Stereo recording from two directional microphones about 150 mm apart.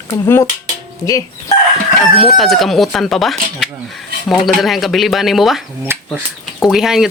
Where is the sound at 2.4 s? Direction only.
Centre (ahead or behind).